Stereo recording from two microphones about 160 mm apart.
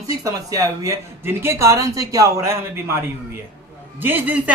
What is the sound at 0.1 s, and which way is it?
Speech, 20° right (ahead or behind).